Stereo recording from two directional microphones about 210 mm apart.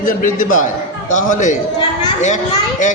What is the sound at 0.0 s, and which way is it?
Speech, 40° left (ahead or behind).